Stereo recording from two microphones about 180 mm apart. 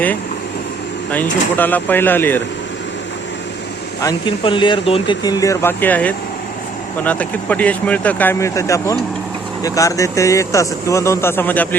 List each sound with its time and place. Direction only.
1.1 s speech: 10° left (ahead or behind)
4.0 s speech: 25° left (ahead or behind); by 11.8 s 10° left (ahead or behind)